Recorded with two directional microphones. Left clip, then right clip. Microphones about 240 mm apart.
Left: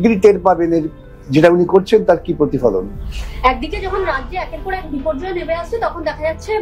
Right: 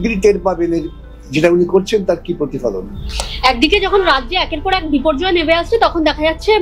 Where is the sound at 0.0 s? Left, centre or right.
Left.